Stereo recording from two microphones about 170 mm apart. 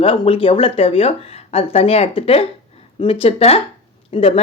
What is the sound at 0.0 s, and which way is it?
Speech, 30° left (ahead or behind).